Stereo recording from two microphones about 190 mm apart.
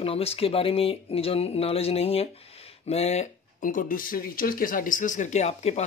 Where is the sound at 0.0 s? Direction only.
30° left (ahead or behind).